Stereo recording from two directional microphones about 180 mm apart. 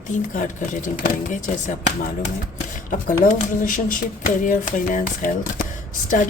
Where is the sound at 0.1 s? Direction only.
45° left (ahead or behind).